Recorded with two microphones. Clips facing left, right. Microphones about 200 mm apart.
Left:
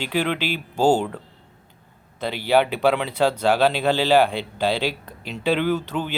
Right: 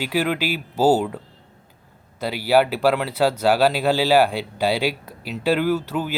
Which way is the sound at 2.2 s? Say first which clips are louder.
Right 1 dB; 5° right (ahead or behind).